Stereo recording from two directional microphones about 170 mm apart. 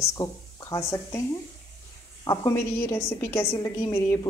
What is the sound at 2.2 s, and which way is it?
A woman's voice, 20° left (ahead or behind).